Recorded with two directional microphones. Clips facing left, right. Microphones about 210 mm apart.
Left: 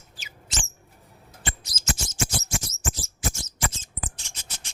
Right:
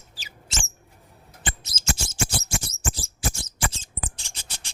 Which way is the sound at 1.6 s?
30° right (ahead or behind).